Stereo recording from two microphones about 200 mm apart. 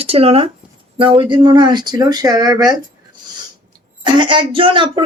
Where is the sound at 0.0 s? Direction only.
30° right (ahead or behind).